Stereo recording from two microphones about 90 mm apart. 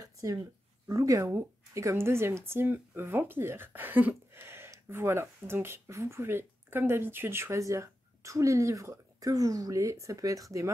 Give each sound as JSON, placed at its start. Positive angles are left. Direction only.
{"t": 0.0, "sound": "speech", "side_deg": -45}